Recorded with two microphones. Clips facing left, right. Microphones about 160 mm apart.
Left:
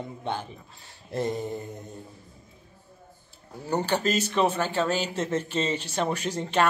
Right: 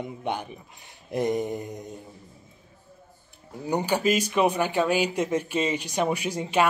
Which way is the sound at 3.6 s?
10° right (ahead or behind).